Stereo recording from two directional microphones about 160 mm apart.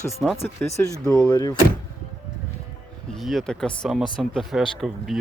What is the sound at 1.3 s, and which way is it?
Speech, 25° left (ahead or behind).